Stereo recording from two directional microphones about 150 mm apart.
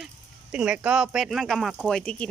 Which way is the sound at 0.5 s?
5° right (ahead or behind).